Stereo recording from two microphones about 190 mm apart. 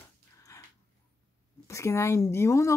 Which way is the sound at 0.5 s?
15° left (ahead or behind).